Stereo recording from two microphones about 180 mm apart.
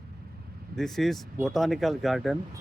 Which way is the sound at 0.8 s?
Centre (ahead or behind).